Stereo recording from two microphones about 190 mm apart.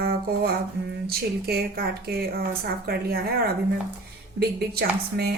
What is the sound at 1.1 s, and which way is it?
A woman's voice, 55° right (ahead or behind).